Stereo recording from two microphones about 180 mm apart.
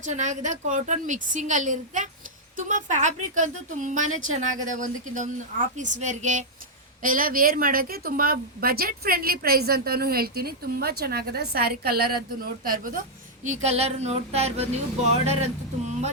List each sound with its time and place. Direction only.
0.0 s a woman's voice: 40° right (ahead or behind)
13.4 s speech: 40° right (ahead or behind)